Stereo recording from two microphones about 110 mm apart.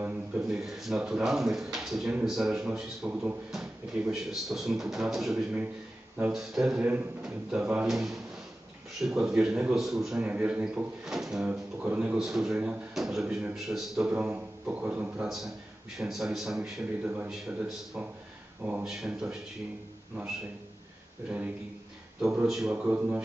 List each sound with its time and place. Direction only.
0.0 s speech: 10° right (ahead or behind)
12.2 s speech: 5° right (ahead or behind)
22.4 s speech: 5° right (ahead or behind)
22.8 s speech: 15° right (ahead or behind)